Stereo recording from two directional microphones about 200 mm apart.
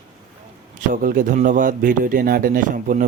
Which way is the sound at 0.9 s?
45° right (ahead or behind).